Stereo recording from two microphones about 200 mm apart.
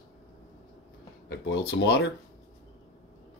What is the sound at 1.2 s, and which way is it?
Speech, 60° left (ahead or behind).